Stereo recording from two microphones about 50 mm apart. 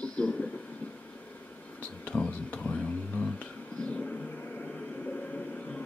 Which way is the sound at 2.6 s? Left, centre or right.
Left.